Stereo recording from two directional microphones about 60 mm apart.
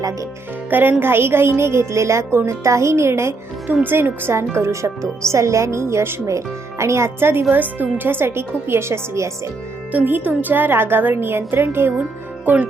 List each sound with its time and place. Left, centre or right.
0.7 s a woman's voice: right
3.8 s a woman's voice: right
4.5 s a woman's voice: right
6.2 s a woman's voice: right
9.9 s a woman's voice: right